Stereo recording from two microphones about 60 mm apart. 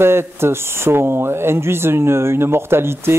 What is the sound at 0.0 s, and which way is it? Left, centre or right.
A man's voice, right.